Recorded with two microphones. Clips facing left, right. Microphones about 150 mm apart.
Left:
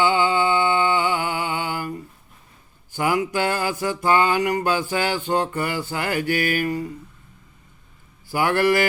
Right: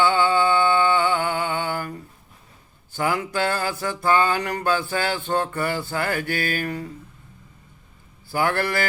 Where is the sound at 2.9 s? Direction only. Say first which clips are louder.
Left 2 dB; 15° left (ahead or behind).